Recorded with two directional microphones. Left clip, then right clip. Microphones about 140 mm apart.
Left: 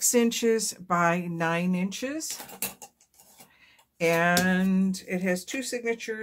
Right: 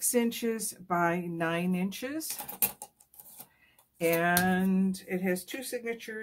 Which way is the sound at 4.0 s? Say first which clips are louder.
Left 4 dB; 20° left (ahead or behind).